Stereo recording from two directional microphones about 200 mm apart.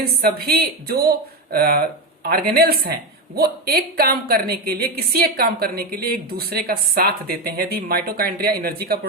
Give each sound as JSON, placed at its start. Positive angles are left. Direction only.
{"t": 0.2, "sound": "speech", "side_deg": -50}